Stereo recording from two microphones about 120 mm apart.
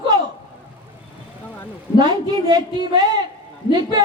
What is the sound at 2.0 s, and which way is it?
Speech, 40° right (ahead or behind).